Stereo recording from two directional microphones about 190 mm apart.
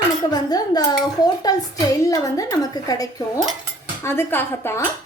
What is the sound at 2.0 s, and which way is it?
A woman's voice, 20° left (ahead or behind).